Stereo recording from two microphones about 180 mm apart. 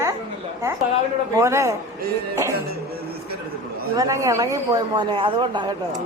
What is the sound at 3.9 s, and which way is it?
Speech, 20° right (ahead or behind).